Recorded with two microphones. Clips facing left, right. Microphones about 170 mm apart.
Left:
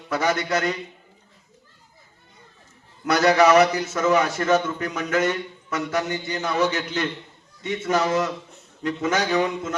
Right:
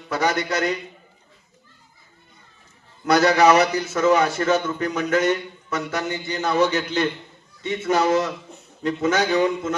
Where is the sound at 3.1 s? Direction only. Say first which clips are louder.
Right 1 dB; 30° right (ahead or behind).